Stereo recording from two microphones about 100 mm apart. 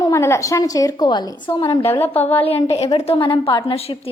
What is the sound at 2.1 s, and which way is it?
A woman's voice, 80° left.